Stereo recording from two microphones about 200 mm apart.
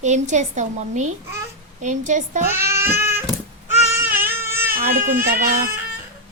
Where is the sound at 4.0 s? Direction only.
10° right (ahead or behind).